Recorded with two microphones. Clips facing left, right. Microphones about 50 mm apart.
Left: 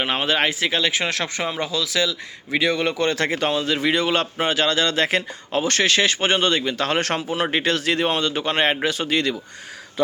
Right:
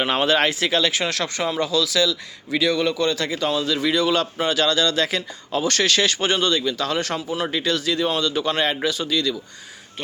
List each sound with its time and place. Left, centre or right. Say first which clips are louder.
0.0 s speech: right 2 dB; centre; by 3.5 s left
3.5 s speech: even; left